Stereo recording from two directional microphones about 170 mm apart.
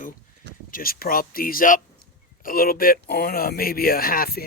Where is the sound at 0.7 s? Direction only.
60° left (ahead or behind).